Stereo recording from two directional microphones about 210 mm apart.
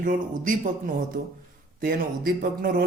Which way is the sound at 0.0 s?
40° right (ahead or behind).